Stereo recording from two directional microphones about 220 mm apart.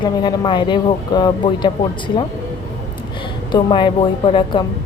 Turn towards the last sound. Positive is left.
turn(degrees=20)  # may be behind; listen again after turning